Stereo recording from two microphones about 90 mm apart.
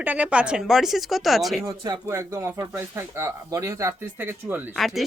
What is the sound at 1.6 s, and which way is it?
Speech, 45° right (ahead or behind).